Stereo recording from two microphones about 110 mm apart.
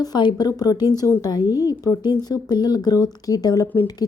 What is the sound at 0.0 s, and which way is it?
A woman's voice, 40° left (ahead or behind).